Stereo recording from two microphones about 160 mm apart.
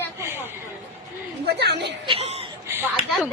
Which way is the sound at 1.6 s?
90° right.